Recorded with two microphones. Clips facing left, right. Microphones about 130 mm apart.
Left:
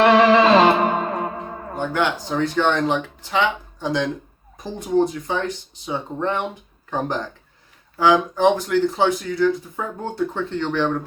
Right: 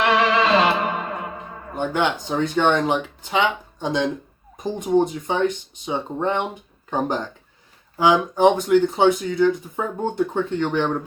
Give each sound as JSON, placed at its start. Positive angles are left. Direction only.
{"t": 0.0, "sound": "music", "side_deg": 40}
{"t": 1.7, "sound": "speech", "side_deg": -20}
{"t": 7.9, "sound": "speech", "side_deg": -15}